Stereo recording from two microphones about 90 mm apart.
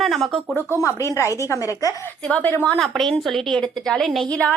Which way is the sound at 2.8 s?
5° left (ahead or behind).